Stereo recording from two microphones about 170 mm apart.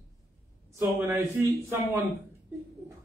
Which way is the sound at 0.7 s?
15° right (ahead or behind).